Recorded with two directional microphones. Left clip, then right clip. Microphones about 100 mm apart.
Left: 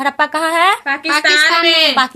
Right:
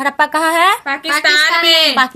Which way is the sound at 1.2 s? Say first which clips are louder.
Even; 35° right (ahead or behind).